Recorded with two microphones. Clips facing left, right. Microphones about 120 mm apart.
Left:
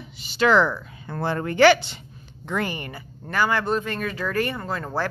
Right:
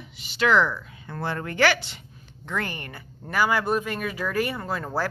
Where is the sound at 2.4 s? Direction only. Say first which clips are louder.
Left 4 dB; 15° left (ahead or behind).